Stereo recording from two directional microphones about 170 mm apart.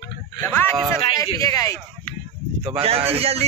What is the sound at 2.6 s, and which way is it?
Speech, 35° right (ahead or behind).